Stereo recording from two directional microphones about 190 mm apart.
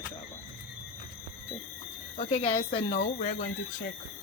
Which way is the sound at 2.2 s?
35° left (ahead or behind).